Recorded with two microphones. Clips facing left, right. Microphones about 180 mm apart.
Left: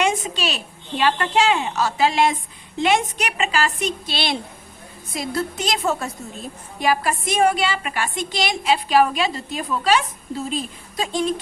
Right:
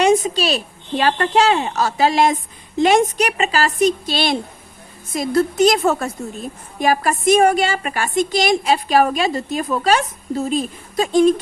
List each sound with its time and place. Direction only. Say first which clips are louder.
0.0 s a woman's voice: right 7 dB; 40° right (ahead or behind)